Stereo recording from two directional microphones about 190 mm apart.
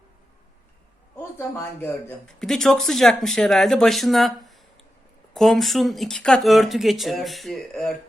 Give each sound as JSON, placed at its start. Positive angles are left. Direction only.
{"t": 1.2, "sound": "speech", "side_deg": 15}